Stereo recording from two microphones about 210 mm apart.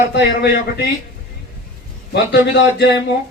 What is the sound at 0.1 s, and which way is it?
Speech, 50° left (ahead or behind).